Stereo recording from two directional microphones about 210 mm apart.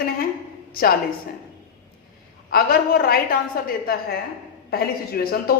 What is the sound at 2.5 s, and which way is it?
A woman's voice, 45° left (ahead or behind).